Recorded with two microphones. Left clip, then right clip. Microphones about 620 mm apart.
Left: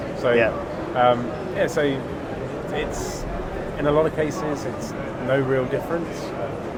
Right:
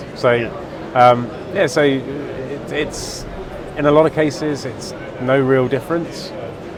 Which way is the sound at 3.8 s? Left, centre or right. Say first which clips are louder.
Right 7 dB; right.